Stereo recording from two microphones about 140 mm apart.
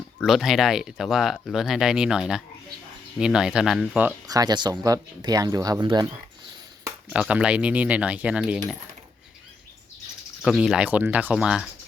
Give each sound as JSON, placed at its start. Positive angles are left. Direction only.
{"t": 0.2, "sound": "speech", "side_deg": 0}
{"t": 4.3, "sound": "speech", "side_deg": -30}
{"t": 7.1, "sound": "speech", "side_deg": -10}
{"t": 10.4, "sound": "speech", "side_deg": -5}